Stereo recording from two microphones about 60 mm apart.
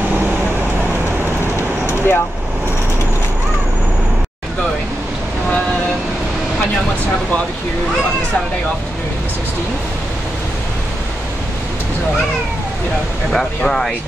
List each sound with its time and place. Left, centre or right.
1.6 s vehicle: left
13.6 s speech: centre